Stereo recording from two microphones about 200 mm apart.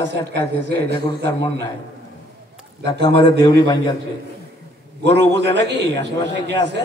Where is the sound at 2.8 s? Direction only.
20° left (ahead or behind).